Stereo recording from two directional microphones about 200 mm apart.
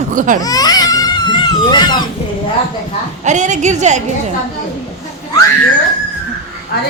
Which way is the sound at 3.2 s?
35° right (ahead or behind).